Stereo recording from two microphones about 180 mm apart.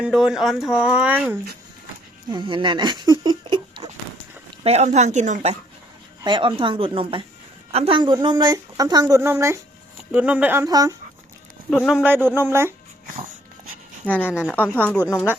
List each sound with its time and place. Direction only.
0.0 s speech: centre (ahead or behind)
2.3 s speech: 25° right (ahead or behind)
4.6 s speech: 35° right (ahead or behind)
6.2 s a woman's voice: 25° right (ahead or behind)
11.9 s speech: 5° right (ahead or behind)
14.0 s speech: 10° left (ahead or behind)